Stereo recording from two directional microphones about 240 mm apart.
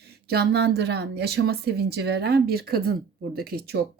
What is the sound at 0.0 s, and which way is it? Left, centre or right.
Speech, right.